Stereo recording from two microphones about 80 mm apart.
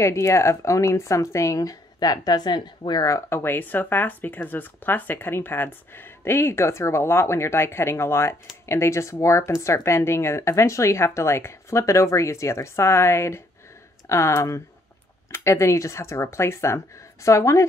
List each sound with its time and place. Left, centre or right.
0.0 s speech: left
3.3 s speech: left